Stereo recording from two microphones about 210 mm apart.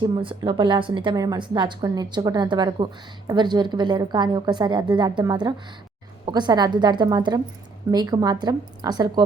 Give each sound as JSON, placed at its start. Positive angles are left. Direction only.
{"t": 0.0, "sound": "a woman's voice", "side_deg": -25}